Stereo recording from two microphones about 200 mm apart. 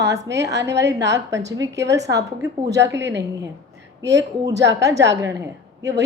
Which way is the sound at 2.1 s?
15° right (ahead or behind).